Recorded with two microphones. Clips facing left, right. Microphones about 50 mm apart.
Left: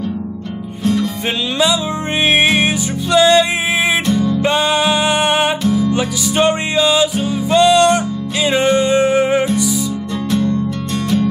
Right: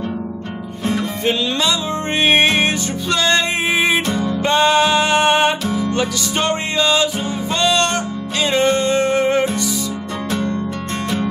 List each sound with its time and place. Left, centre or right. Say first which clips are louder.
1.2 s music: right 1 dB; centre
4.1 s music: left 4 dB; right
4.4 s music: right 1 dB; centre
10.3 s music: left 5 dB; right